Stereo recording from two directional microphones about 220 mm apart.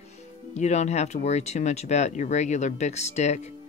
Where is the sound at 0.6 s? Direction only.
30° left (ahead or behind).